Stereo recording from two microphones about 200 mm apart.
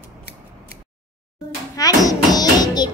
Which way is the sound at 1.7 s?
20° left (ahead or behind).